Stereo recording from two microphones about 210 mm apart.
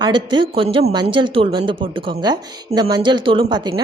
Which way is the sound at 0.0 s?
20° right (ahead or behind).